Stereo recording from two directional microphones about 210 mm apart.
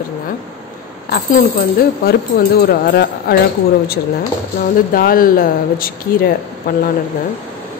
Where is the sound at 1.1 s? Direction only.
45° left (ahead or behind).